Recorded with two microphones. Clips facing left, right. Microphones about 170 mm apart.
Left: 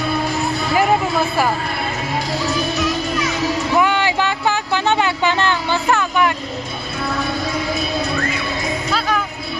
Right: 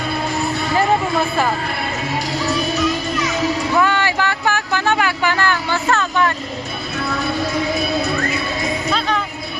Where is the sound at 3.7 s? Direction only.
15° left (ahead or behind).